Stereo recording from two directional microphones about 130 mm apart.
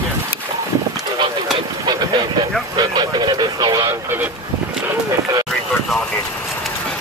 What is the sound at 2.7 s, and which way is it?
Speech, 35° right (ahead or behind).